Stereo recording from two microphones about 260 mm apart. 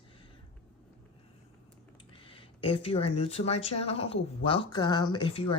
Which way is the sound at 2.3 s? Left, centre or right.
Left.